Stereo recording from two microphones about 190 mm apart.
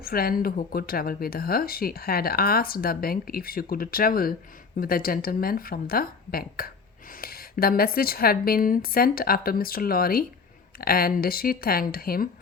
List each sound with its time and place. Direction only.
0.0 s speech: 50° left (ahead or behind)